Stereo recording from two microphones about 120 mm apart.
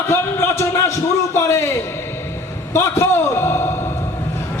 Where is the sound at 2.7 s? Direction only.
25° left (ahead or behind).